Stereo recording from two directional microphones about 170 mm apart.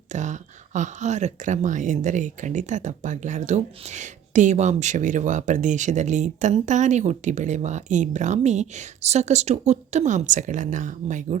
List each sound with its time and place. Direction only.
0.1 s speech: 45° right (ahead or behind)